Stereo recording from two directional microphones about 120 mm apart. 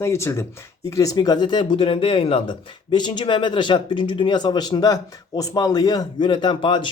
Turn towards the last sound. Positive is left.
turn(degrees=40)  # may be behind; listen again after turning